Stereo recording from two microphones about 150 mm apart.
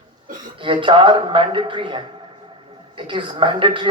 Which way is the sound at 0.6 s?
35° right (ahead or behind).